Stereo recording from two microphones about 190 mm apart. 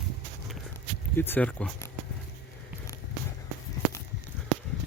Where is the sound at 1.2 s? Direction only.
10° left (ahead or behind).